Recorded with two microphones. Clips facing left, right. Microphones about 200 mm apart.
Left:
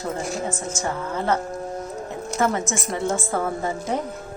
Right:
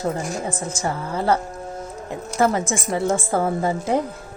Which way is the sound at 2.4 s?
35° right (ahead or behind).